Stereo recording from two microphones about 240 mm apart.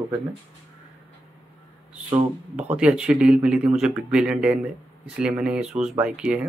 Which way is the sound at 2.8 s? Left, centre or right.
Centre.